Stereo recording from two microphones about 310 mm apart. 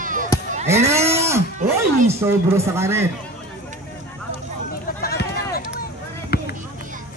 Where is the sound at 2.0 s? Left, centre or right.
Centre.